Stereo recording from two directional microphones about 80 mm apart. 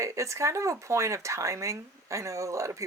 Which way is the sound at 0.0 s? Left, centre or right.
Right.